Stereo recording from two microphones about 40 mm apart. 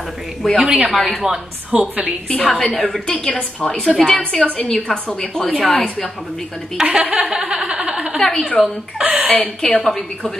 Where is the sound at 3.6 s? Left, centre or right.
Centre.